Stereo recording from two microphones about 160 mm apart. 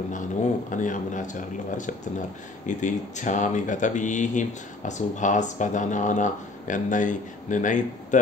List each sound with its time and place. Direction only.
0.1 s speech: 50° left (ahead or behind)